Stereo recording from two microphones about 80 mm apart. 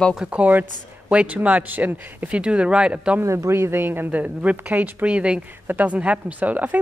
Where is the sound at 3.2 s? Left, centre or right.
Right.